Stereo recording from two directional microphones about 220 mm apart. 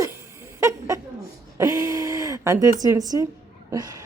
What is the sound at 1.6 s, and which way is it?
Speech, 15° right (ahead or behind).